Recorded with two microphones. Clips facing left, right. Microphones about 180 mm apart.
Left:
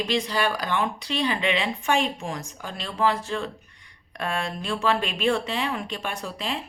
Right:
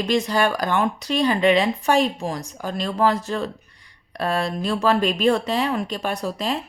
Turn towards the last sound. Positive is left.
turn(degrees=-40)  # may be behind; listen again after turning